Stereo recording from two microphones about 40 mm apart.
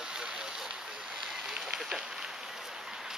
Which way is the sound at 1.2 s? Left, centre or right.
Centre.